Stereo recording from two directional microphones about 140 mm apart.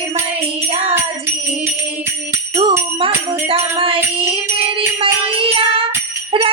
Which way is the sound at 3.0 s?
40° right (ahead or behind).